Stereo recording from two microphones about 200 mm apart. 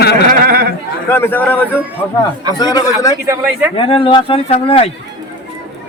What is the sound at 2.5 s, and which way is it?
Speech, 20° left (ahead or behind).